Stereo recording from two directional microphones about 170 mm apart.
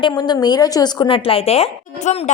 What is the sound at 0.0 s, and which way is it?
A woman's voice, 25° left (ahead or behind).